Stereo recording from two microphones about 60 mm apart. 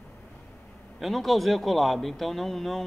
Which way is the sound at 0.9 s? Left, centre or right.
Centre.